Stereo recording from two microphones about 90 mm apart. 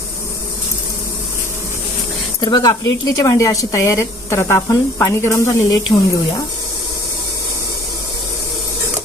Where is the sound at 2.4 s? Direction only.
50° left (ahead or behind); by 5.4 s 25° left (ahead or behind).